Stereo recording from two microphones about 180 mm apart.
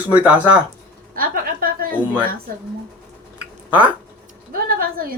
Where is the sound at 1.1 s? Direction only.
55° right (ahead or behind).